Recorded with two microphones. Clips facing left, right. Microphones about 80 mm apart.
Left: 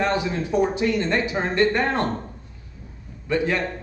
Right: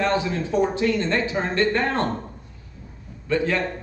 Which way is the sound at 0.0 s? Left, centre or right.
Centre.